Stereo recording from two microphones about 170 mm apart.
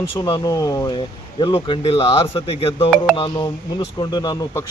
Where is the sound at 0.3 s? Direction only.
25° left (ahead or behind).